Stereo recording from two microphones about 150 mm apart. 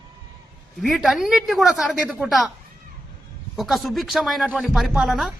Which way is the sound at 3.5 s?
Centre (ahead or behind).